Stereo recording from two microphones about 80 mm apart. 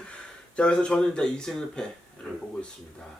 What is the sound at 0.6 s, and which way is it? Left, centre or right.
Speech, centre.